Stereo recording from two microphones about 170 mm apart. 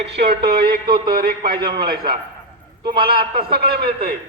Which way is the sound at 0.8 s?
25° right (ahead or behind).